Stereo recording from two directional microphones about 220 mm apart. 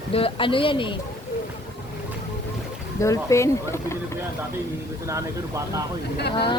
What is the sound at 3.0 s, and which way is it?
Speech, 15° left (ahead or behind).